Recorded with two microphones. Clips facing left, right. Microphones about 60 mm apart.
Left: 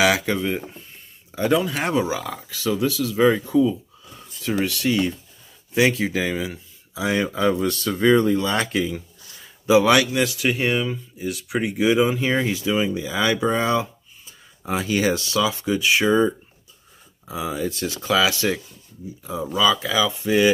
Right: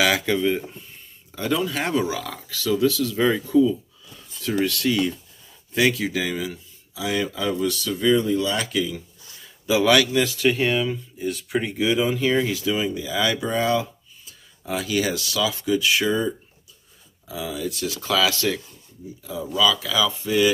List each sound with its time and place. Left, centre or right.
0.0 s speech: centre
4.5 s speech: centre
10.2 s speech: centre
11.8 s speech: left
18.0 s speech: centre
19.2 s speech: left